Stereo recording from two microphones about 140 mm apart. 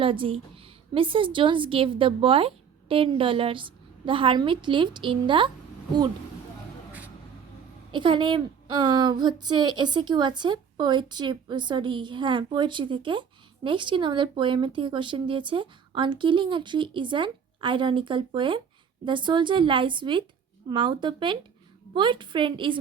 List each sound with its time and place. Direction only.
0.0 s a woman's voice: 40° right (ahead or behind)
7.9 s a woman's voice: 35° right (ahead or behind)